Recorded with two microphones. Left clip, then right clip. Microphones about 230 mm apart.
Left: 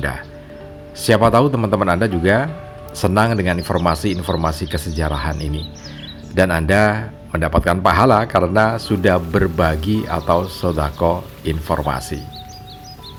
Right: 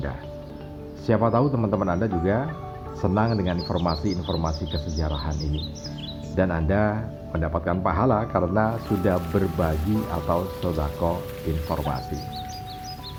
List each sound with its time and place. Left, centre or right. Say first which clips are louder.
1.0 s speech: left 9 dB; left